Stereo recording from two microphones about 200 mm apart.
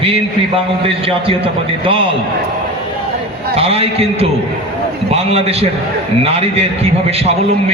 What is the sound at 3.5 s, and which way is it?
A man's voice, 30° right (ahead or behind).